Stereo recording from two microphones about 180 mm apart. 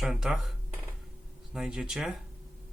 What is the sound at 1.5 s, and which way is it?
Speech, 5° right (ahead or behind).